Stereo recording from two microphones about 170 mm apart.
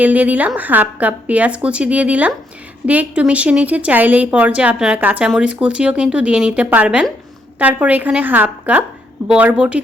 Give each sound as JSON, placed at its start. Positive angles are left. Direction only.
{"t": 0.0, "sound": "speech", "side_deg": -10}